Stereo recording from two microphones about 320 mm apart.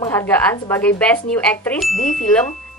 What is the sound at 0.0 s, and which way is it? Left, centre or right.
A woman's voice, centre.